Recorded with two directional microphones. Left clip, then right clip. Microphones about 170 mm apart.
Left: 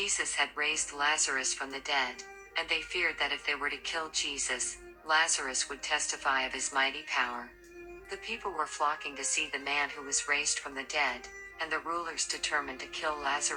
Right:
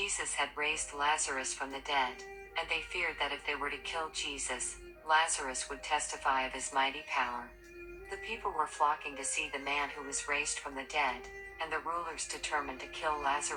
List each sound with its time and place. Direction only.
0.0 s a woman's voice: 50° left (ahead or behind)